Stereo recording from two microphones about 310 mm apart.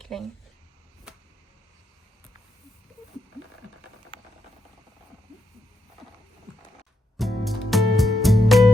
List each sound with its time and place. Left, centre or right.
0.0 s speech: centre
7.2 s music: centre